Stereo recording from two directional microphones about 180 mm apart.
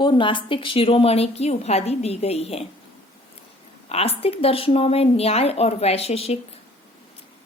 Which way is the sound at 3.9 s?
35° left (ahead or behind).